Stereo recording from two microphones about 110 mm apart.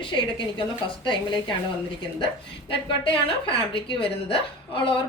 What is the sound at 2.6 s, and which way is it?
A woman's voice, 50° left (ahead or behind).